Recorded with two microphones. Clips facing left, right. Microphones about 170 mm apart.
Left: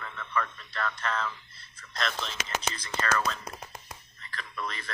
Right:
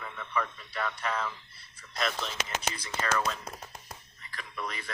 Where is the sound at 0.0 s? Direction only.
10° right (ahead or behind).